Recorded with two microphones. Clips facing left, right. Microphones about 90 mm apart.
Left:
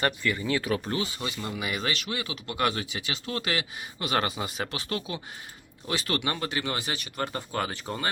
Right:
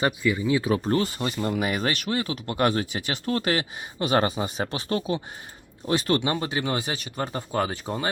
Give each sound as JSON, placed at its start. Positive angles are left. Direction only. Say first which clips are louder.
{"t": 0.0, "sound": "speech", "louder": "right 4 dB", "side_deg": -15}
{"t": 0.9, "sound": "speech", "louder": "right 6 dB", "side_deg": -50}
{"t": 6.2, "sound": "speech", "louder": "right 4 dB", "side_deg": -25}